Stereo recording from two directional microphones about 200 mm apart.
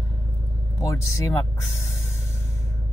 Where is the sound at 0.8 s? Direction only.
15° left (ahead or behind).